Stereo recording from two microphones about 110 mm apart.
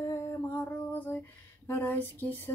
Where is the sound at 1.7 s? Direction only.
20° left (ahead or behind).